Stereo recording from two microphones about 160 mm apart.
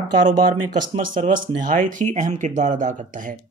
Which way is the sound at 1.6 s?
55° right (ahead or behind).